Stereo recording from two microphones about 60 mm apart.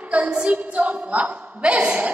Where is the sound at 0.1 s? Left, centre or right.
Centre.